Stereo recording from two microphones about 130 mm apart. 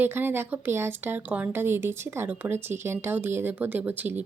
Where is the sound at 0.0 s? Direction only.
15° right (ahead or behind).